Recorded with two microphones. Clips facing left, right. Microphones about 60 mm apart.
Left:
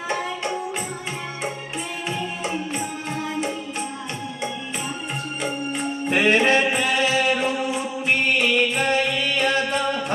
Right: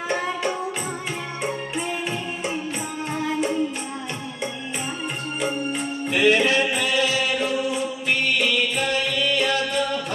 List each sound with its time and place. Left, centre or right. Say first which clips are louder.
6.0 s music: left 1 dB; left